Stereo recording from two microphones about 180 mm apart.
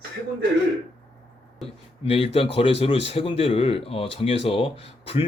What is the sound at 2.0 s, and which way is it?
Speech, 30° left (ahead or behind).